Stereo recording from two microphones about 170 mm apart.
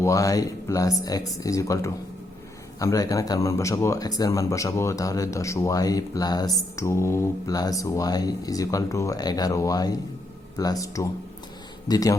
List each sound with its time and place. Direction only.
0.0 s a man's voice: 20° left (ahead or behind)